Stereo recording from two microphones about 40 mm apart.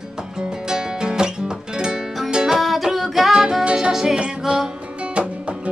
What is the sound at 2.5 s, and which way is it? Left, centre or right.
Music, centre.